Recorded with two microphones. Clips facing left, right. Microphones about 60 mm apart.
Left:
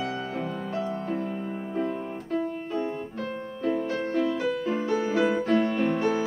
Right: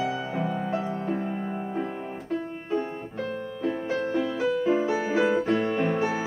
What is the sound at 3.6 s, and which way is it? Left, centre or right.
Music, centre.